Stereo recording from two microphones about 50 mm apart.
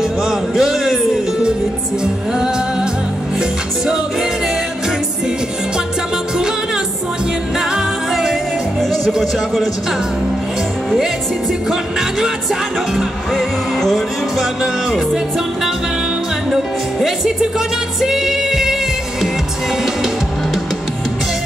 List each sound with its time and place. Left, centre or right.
0.2 s music: centre
7.5 s music: centre
9.2 s speech: centre
13.3 s music: centre
16.4 s music: centre